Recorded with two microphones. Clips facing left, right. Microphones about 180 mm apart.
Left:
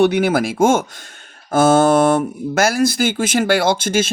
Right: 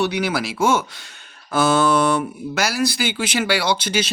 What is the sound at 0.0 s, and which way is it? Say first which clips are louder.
Speech: left 7 dB; 50° left (ahead or behind).